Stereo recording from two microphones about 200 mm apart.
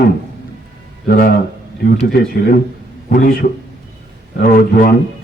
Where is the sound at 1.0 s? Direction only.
50° left (ahead or behind).